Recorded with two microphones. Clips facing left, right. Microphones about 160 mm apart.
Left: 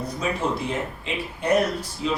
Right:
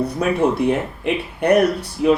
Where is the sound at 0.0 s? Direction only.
60° right (ahead or behind).